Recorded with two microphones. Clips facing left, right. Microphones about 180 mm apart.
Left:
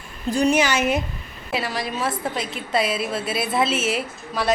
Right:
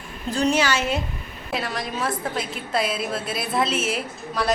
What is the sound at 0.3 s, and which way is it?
Speech, 15° left (ahead or behind).